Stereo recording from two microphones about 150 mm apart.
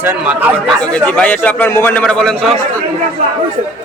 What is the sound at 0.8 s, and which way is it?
A man's voice, 5° left (ahead or behind).